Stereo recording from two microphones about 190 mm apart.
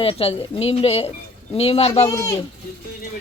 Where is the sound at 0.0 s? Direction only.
30° left (ahead or behind).